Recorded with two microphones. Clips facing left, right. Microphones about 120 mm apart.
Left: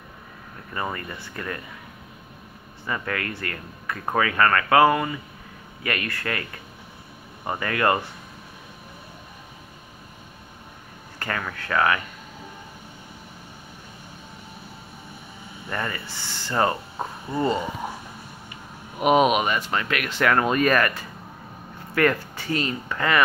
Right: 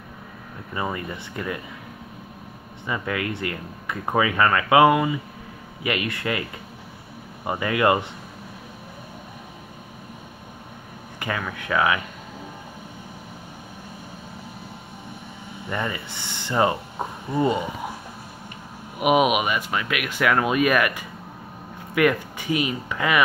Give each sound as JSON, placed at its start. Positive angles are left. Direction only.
{"t": 0.7, "sound": "speech", "side_deg": -15}
{"t": 2.9, "sound": "speech", "side_deg": -15}
{"t": 7.4, "sound": "speech", "side_deg": -15}
{"t": 11.1, "sound": "speech", "side_deg": -10}
{"t": 15.7, "sound": "speech", "side_deg": -15}
{"t": 18.9, "sound": "speech", "side_deg": -10}